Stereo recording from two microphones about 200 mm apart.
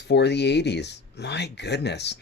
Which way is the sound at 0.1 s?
55° left (ahead or behind).